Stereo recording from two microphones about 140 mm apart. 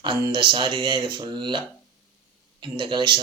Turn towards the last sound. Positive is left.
turn(degrees=-35)  # may be behind; listen again after turning